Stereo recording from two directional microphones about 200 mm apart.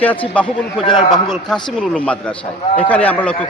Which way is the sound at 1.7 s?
5° left (ahead or behind).